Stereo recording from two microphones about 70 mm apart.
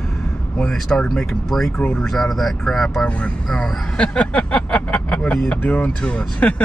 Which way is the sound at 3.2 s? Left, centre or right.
Centre.